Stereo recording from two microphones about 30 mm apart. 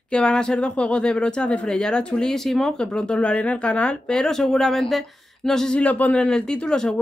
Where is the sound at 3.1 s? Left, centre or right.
Left.